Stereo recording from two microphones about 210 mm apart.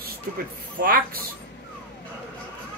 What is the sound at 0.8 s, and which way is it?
Speech, 45° right (ahead or behind).